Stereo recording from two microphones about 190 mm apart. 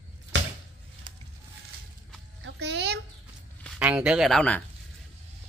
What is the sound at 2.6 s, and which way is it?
Chicken, 65° right (ahead or behind).